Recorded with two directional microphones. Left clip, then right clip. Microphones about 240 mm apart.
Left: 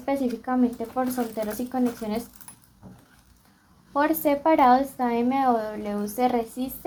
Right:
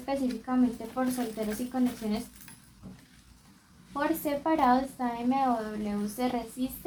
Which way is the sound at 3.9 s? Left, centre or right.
Left.